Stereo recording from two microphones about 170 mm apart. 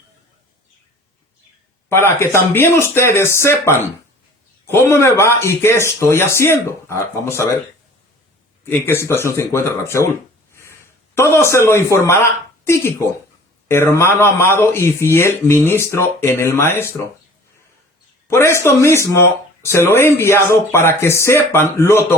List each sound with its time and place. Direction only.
1.9 s speech: 15° left (ahead or behind)
8.8 s speech: 15° left (ahead or behind)
10.5 s a sound: 15° left (ahead or behind)
12.2 s a woman's voice: 15° left (ahead or behind)
18.3 s speech: 15° left (ahead or behind)